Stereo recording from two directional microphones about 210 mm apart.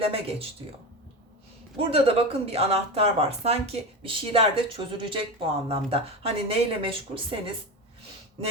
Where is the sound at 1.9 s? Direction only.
30° right (ahead or behind).